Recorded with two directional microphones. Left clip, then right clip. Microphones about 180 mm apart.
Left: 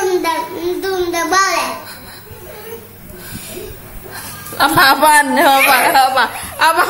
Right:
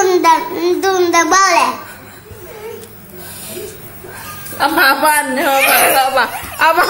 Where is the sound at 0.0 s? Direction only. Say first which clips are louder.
Right 5 dB; 40° right (ahead or behind).